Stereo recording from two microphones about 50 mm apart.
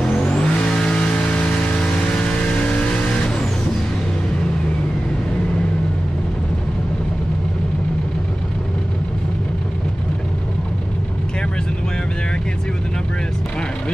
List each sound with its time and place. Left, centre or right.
0.2 s vehicle: centre